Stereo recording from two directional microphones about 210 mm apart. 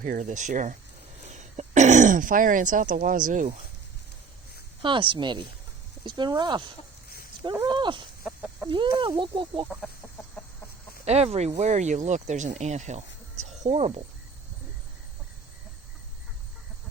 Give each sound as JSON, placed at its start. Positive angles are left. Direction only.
{"t": 0.0, "sound": "speech", "side_deg": -35}
{"t": 4.8, "sound": "speech", "side_deg": -25}
{"t": 8.2, "sound": "chicken", "side_deg": -10}
{"t": 8.7, "sound": "speech", "side_deg": -25}
{"t": 11.0, "sound": "speech", "side_deg": -30}